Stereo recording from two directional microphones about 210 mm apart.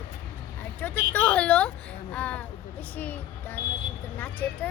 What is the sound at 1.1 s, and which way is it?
A woman's voice, 5° left (ahead or behind).